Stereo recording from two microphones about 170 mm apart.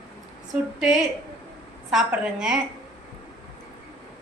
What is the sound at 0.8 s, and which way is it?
A woman's voice, 5° right (ahead or behind).